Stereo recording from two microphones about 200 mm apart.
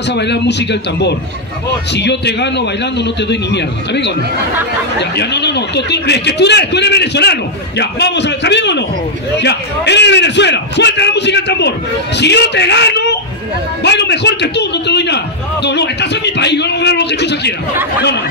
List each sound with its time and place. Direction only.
0.1 s a man's voice: 60° left (ahead or behind)
5.1 s a man's voice: 55° left (ahead or behind)